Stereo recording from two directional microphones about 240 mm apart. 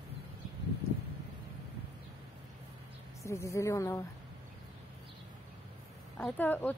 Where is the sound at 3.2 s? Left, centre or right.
Centre.